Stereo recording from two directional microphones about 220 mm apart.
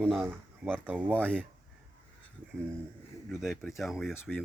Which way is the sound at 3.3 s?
Centre (ahead or behind).